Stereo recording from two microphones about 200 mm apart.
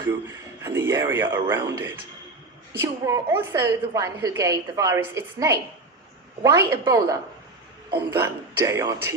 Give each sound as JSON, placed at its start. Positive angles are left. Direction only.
{"t": 0.6, "sound": "a woman's voice", "side_deg": -10}